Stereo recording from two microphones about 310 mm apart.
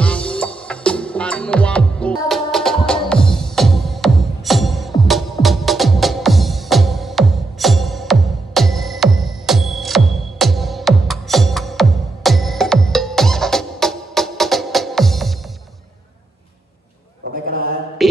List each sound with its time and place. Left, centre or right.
0.0 s music: centre